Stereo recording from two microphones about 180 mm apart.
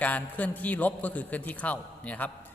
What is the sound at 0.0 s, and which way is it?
A man's voice, 10° left (ahead or behind).